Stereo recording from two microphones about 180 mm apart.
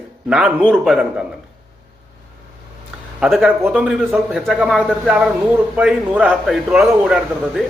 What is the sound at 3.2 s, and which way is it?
A man's voice, centre (ahead or behind).